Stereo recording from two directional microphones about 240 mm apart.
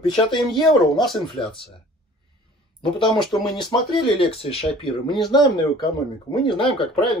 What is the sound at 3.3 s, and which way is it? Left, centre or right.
Speech, centre.